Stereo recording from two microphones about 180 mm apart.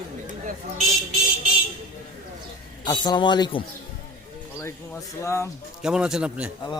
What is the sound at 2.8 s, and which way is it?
Speech, 25° left (ahead or behind).